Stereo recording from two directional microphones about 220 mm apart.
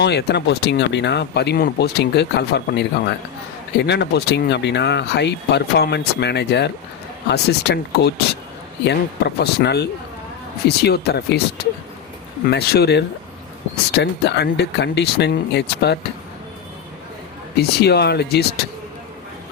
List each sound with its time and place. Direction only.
0.0 s speech: 50° left (ahead or behind)
12.5 s speech: 45° left (ahead or behind)
17.6 s speech: 45° left (ahead or behind)